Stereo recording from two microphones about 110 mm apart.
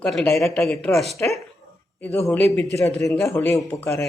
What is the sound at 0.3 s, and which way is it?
Speech, 25° left (ahead or behind).